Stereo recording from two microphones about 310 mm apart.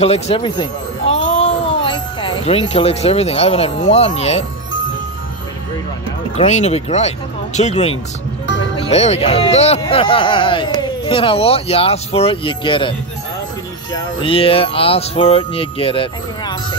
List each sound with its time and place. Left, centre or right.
0.0 s speech: centre
6.3 s speech: left
14.2 s speech: centre